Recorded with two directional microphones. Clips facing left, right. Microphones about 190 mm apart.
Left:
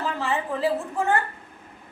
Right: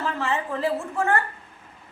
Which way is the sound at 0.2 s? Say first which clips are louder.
Left 1 dB; 15° left (ahead or behind).